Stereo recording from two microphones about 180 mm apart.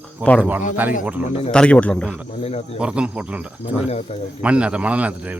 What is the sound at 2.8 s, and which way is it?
Speech, 5° right (ahead or behind).